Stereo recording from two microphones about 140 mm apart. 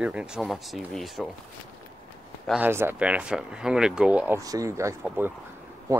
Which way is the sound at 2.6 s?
15° right (ahead or behind).